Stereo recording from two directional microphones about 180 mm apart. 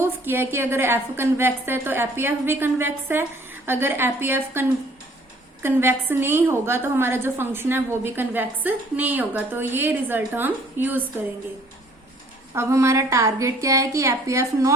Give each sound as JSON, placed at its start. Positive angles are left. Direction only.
{"t": 0.0, "sound": "a woman's voice", "side_deg": -15}
{"t": 5.6, "sound": "a woman's voice", "side_deg": -10}
{"t": 12.5, "sound": "a woman's voice", "side_deg": -15}